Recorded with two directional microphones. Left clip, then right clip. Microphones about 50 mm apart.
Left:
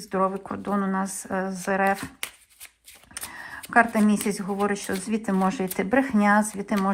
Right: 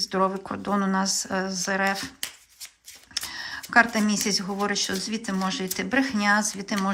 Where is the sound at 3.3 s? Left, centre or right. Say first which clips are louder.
Even; centre.